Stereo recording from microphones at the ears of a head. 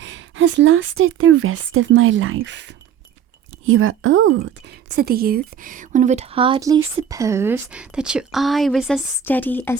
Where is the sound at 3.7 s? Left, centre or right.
Right.